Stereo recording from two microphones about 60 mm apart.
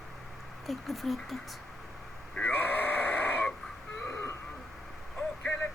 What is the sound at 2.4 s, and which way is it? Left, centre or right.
Sheep, left.